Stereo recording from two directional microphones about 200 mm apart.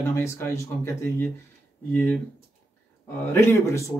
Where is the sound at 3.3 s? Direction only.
10° left (ahead or behind).